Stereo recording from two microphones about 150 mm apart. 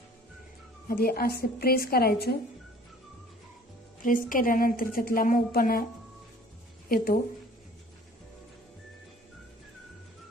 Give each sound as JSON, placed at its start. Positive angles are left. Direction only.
{"t": 0.9, "sound": "a woman's voice", "side_deg": 85}
{"t": 4.3, "sound": "a woman's voice", "side_deg": 70}
{"t": 6.8, "sound": "speech", "side_deg": 85}